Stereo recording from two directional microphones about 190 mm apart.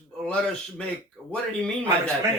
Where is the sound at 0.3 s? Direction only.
5° left (ahead or behind).